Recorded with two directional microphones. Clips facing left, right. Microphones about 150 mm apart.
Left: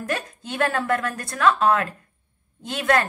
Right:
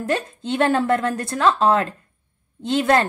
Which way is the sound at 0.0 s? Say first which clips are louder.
Right 5 dB; 25° right (ahead or behind).